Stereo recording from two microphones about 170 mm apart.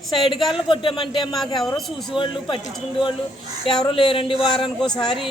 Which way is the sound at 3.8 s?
30° left (ahead or behind).